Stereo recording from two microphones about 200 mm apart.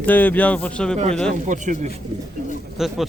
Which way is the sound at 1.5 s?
40° right (ahead or behind).